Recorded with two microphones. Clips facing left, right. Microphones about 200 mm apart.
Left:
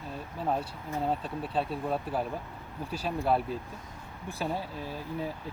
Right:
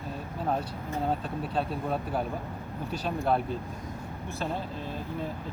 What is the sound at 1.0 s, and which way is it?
Speech, centre (ahead or behind).